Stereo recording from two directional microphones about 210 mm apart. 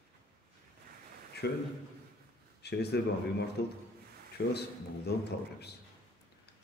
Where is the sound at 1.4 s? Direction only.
50° left (ahead or behind).